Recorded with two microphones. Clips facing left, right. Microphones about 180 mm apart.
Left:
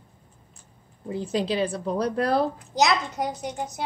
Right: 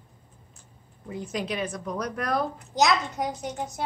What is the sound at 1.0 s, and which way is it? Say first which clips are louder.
Speech: left 5 dB; 30° left (ahead or behind).